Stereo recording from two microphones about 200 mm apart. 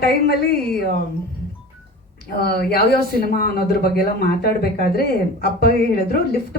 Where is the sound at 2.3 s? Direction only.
50° left (ahead or behind).